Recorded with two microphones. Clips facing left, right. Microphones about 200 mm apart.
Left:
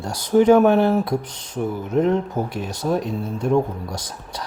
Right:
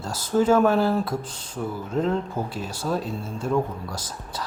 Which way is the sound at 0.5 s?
20° left (ahead or behind).